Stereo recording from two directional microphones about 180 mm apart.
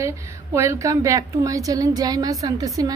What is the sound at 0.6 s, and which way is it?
A woman's voice, 15° right (ahead or behind).